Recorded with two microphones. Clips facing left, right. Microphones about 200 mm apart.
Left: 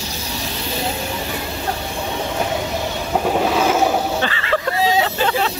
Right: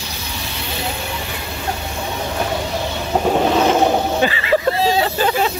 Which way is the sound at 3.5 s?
5° left (ahead or behind).